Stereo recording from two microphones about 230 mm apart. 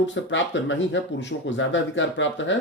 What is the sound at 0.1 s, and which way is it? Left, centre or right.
A man's voice, left.